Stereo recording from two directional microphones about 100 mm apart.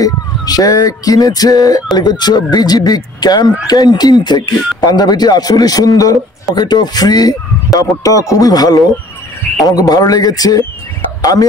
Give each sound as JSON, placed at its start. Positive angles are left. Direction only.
{"t": 0.0, "sound": "speech", "side_deg": 40}